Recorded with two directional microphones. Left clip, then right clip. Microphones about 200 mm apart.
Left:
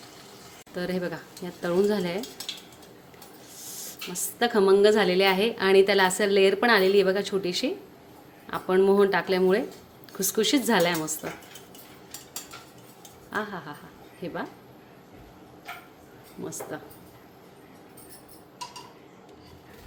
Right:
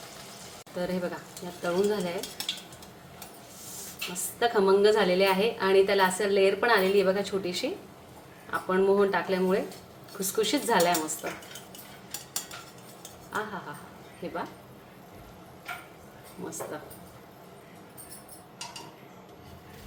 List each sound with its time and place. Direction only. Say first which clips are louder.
0.8 s a woman's voice: left 1 dB; 40° left (ahead or behind)
4.1 s a woman's voice: left 1 dB; 40° left (ahead or behind)
14.2 s a woman's voice: left 1 dB; 35° left (ahead or behind)